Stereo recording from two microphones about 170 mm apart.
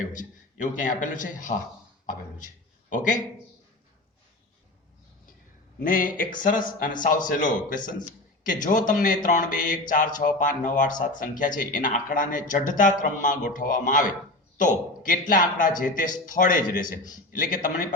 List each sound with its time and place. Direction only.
0.1 s speech: 50° left (ahead or behind)
2.9 s speech: 50° left (ahead or behind)
5.8 s speech: 55° left (ahead or behind)